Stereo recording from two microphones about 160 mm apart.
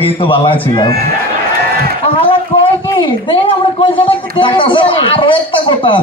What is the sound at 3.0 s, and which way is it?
Speech, 30° left (ahead or behind).